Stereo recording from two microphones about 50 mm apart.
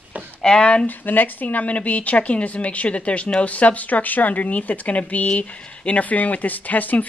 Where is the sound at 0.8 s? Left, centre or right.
Left.